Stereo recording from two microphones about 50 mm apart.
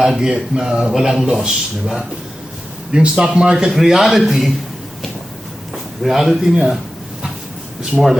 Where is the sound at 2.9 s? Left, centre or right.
Centre.